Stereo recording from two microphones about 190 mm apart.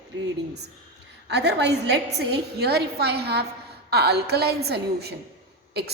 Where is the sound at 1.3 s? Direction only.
60° right (ahead or behind).